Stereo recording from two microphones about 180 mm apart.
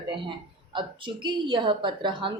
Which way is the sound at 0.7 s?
25° right (ahead or behind).